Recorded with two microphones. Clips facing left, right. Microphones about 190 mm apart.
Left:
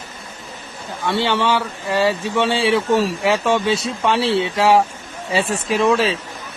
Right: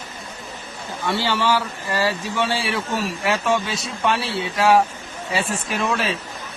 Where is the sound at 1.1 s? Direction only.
25° left (ahead or behind).